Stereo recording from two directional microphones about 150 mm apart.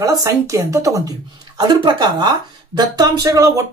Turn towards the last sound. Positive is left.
turn(degrees=-20)  # may be behind; listen again after turning